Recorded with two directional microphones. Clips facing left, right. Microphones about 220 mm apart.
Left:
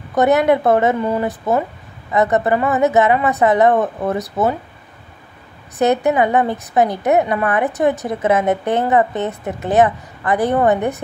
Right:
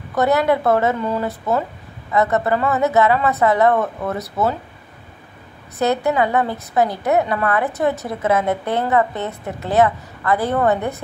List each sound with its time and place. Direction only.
0.1 s a woman's voice: 20° left (ahead or behind)
5.8 s a woman's voice: 20° left (ahead or behind)